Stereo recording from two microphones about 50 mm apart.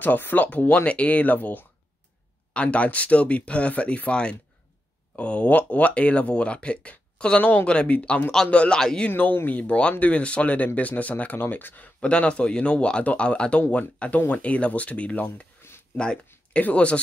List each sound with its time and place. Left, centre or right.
0.0 s speech: left
2.5 s speech: left
8.7 s speech: centre
9.1 s speech: left
9.6 s speech: left
12.0 s speech: left
15.6 s a sound: left
16.5 s speech: left